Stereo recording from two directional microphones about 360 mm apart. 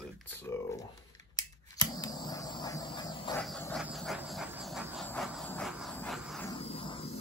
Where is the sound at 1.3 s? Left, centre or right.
Centre.